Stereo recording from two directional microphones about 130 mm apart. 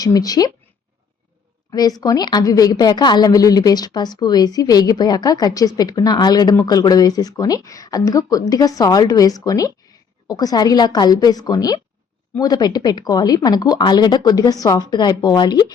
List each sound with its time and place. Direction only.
0.0 s a woman's voice: 30° left (ahead or behind)
2.0 s a woman's voice: 30° left (ahead or behind)